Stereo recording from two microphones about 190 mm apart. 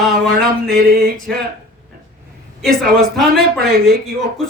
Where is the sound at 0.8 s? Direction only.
55° right (ahead or behind).